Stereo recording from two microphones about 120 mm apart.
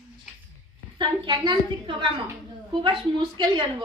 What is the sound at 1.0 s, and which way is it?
Speech, 40° right (ahead or behind).